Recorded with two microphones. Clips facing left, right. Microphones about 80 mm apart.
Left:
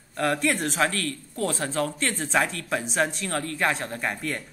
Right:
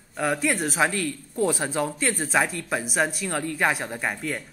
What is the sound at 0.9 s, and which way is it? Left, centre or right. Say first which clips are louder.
Speech: right 2 dB; centre.